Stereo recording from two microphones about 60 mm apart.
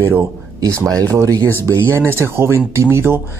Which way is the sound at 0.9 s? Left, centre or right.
Right.